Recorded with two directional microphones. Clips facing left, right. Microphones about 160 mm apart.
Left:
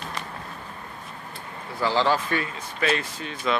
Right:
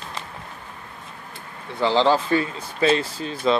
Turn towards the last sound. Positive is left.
turn(degrees=-30)  # may be behind; listen again after turning